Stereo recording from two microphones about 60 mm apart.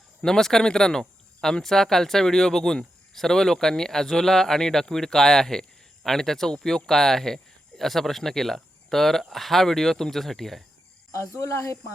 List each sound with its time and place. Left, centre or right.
0.2 s speech: centre
11.1 s speech: left